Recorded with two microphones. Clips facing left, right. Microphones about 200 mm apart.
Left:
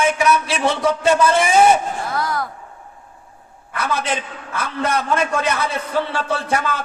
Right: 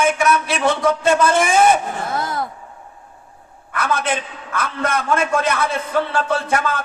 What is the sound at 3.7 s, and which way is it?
Speech, 50° right (ahead or behind).